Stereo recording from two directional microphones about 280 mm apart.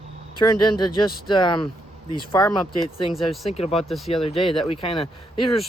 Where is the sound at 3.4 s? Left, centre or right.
Left.